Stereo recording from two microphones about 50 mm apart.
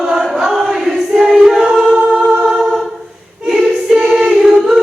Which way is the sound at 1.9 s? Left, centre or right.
Right.